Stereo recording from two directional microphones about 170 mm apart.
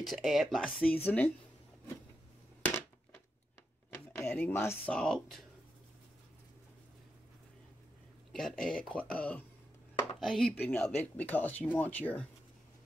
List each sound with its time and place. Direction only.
0.0 s speech: centre (ahead or behind)
3.9 s speech: 10° left (ahead or behind)
8.3 s speech: centre (ahead or behind)